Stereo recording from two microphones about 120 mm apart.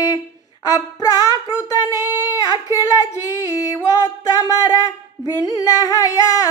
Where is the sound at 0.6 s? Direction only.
30° left (ahead or behind).